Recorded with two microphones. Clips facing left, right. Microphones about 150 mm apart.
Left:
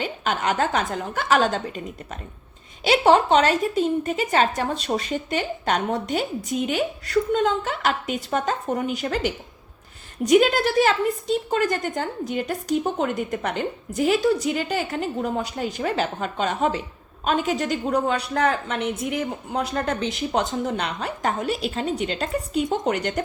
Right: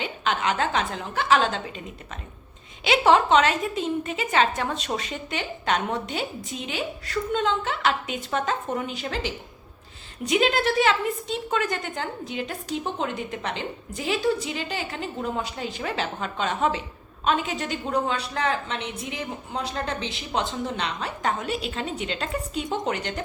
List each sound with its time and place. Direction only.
0.0 s a woman's voice: 45° left (ahead or behind)
2.8 s a woman's voice: 35° left (ahead or behind)